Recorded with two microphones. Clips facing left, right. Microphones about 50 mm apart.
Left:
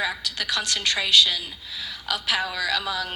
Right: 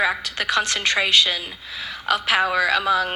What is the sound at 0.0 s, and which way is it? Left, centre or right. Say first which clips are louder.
A woman's voice: right 6 dB; right.